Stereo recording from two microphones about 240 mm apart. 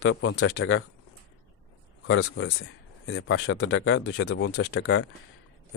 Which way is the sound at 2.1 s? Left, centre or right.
Left.